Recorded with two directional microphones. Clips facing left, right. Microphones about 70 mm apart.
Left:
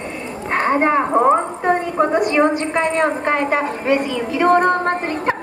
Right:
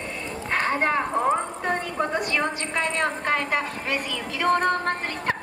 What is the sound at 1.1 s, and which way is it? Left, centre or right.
Speech, left.